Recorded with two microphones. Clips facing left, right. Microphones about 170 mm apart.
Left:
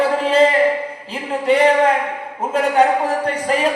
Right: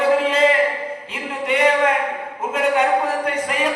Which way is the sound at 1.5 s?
35° left (ahead or behind).